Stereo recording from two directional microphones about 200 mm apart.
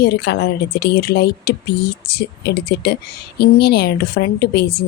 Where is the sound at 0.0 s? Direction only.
55° left (ahead or behind).